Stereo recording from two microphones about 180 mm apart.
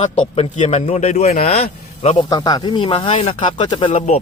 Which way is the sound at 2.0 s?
35° left (ahead or behind).